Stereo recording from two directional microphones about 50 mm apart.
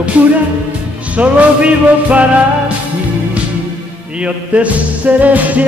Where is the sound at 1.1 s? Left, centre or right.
Right.